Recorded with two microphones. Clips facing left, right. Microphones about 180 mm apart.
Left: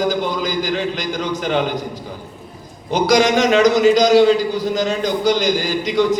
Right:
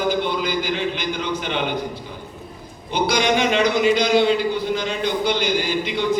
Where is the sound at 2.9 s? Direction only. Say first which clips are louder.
Left 5 dB; 40° left (ahead or behind).